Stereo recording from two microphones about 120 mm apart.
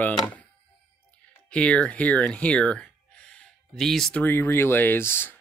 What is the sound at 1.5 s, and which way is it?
Speech, 10° left (ahead or behind).